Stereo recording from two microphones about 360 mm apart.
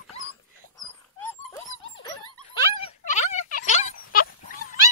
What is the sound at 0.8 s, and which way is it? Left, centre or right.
Dog, centre.